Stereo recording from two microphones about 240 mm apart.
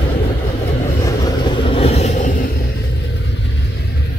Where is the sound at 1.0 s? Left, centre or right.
Left.